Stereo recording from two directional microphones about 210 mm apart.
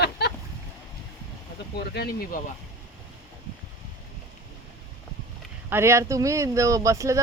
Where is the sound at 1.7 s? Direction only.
50° left (ahead or behind).